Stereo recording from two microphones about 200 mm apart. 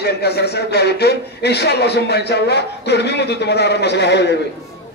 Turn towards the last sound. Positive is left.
turn(degrees=60)  # may be behind; listen again after turning